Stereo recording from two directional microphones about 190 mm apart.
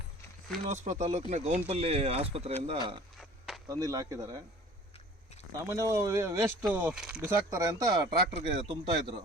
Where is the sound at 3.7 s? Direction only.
20° right (ahead or behind).